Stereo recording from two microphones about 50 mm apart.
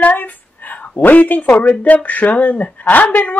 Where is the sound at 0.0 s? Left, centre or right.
Left.